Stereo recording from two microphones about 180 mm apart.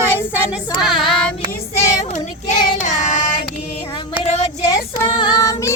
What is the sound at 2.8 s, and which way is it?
Child singing, 40° left (ahead or behind).